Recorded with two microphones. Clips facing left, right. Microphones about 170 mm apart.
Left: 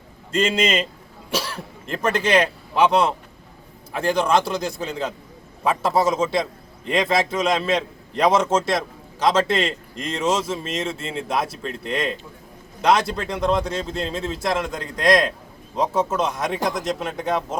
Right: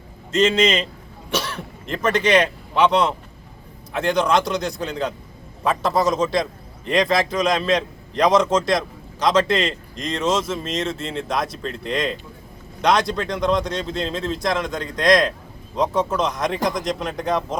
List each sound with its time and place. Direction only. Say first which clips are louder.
0.3 s a man's voice: right 3 dB; 10° left (ahead or behind)
1.3 s speech: right 1 dB; 30° left (ahead or behind)
2.0 s a man's voice: right 2 dB; 10° left (ahead or behind)